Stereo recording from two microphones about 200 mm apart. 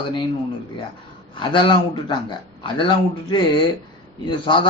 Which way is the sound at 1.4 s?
25° left (ahead or behind).